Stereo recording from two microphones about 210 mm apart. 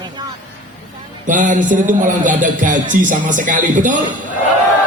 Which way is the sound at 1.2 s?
35° right (ahead or behind).